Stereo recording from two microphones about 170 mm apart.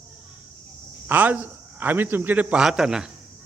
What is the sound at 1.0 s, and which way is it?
A man's voice, 10° right (ahead or behind).